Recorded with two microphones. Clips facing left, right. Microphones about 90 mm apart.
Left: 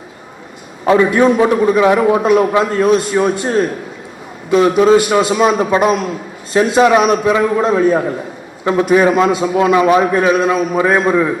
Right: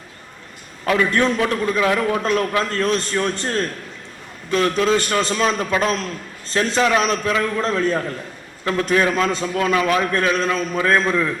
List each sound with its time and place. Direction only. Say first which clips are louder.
0.9 s a man's voice: left 8 dB; 20° left (ahead or behind)
9.7 s a man's voice: left 7 dB; 20° left (ahead or behind)